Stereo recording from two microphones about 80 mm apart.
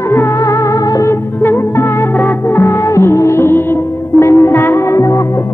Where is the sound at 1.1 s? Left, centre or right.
Left.